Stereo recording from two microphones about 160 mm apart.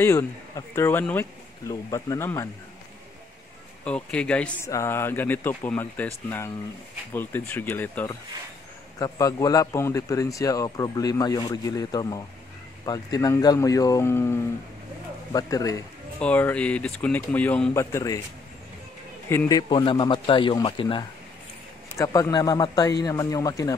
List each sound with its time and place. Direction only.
0.0 s speech: 15° left (ahead or behind)
3.8 s speech: 5° left (ahead or behind)
9.0 s speech: 20° left (ahead or behind)
16.2 s speech: 10° left (ahead or behind)
17.7 s speech: 20° left (ahead or behind)
19.2 s a man's voice: 15° left (ahead or behind)
19.7 s speech: 30° left (ahead or behind)
21.9 s speech: 20° left (ahead or behind)